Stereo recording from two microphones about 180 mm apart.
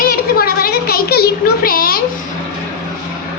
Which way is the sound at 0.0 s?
55° left (ahead or behind).